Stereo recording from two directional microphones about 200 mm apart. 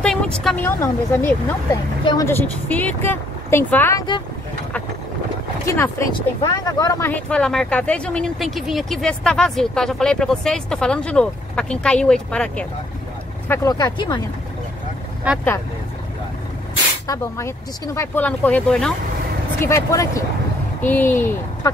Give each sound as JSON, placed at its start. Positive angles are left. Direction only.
{"t": 0.0, "sound": "a woman's voice", "side_deg": 5}
{"t": 5.7, "sound": "speech", "side_deg": 15}
{"t": 13.5, "sound": "speech", "side_deg": 15}
{"t": 17.1, "sound": "speech", "side_deg": 15}
{"t": 19.6, "sound": "speech", "side_deg": 15}